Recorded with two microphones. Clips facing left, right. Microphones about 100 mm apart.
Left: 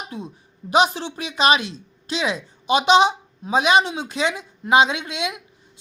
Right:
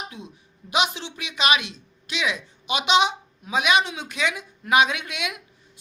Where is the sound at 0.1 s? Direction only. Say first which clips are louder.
Left 7 dB; 40° left (ahead or behind).